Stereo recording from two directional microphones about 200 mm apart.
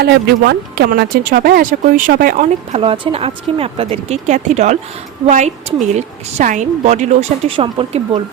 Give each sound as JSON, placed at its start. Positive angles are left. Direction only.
{"t": 0.0, "sound": "speech", "side_deg": -55}
{"t": 2.7, "sound": "a woman's voice", "side_deg": -25}